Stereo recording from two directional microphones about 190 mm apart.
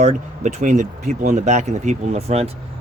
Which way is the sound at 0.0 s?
40° right (ahead or behind).